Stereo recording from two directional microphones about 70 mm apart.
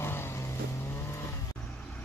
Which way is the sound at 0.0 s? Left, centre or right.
Left.